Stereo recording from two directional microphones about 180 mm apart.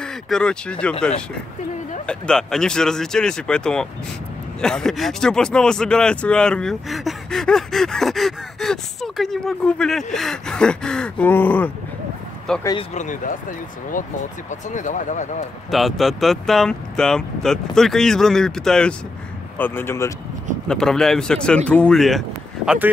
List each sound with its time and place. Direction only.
0.0 s speech: 5° left (ahead or behind)
2.0 s speech: 5° left (ahead or behind)
12.9 s speech: 45° left (ahead or behind)
15.7 s speech: centre (ahead or behind)